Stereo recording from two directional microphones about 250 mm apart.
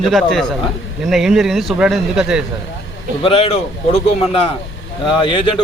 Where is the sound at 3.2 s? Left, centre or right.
Left.